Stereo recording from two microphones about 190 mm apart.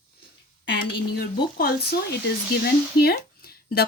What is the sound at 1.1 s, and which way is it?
Speech, 55° left (ahead or behind).